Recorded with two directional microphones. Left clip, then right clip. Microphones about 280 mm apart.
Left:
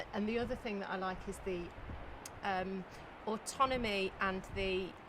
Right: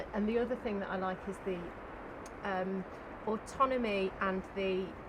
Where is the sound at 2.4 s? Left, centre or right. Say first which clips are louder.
Right 1 dB; left.